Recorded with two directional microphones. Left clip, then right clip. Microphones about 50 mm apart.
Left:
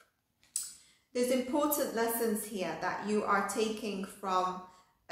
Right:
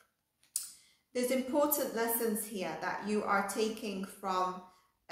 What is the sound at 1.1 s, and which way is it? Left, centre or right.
A woman's voice, right.